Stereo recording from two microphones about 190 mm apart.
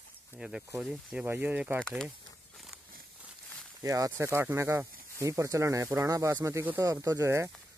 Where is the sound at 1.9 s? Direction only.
Centre (ahead or behind).